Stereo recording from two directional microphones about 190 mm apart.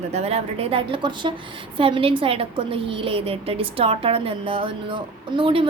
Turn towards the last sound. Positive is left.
turn(degrees=-30)  # may be behind; listen again after turning